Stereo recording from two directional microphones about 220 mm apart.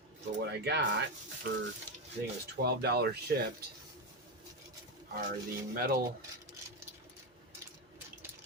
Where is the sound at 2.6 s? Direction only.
45° right (ahead or behind).